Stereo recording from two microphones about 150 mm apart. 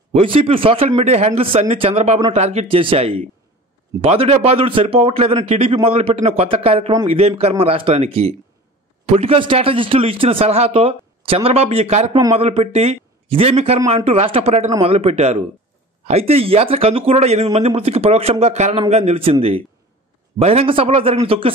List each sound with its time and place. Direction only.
0.1 s a man's voice: 40° right (ahead or behind)
20.3 s a man's voice: 45° right (ahead or behind)